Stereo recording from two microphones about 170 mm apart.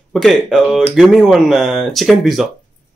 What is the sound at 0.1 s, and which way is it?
Speech, centre (ahead or behind).